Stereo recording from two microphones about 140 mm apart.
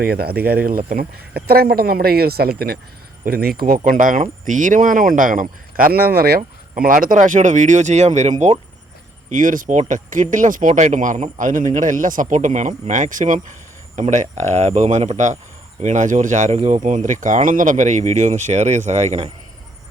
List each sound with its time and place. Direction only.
0.0 s speech: 90° right; by 8.5 s 55° right (ahead or behind)
9.3 s speech: 70° right (ahead or behind); by 19.3 s 50° right (ahead or behind)